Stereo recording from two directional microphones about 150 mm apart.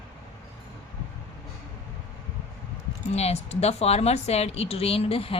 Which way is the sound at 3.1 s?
45° left (ahead or behind).